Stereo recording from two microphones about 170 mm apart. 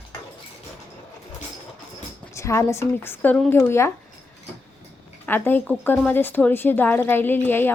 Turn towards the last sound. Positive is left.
turn(degrees=10)  # may be behind; listen again after turning